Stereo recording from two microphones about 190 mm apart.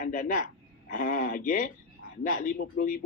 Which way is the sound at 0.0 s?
50° left (ahead or behind).